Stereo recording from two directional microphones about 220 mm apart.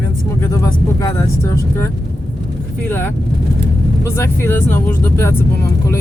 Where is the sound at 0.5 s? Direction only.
15° left (ahead or behind).